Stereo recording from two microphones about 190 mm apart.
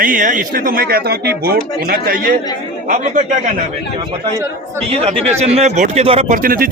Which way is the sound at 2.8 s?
40° right (ahead or behind).